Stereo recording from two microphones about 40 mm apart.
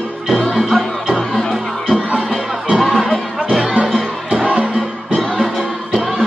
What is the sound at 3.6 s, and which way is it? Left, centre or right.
Music, right.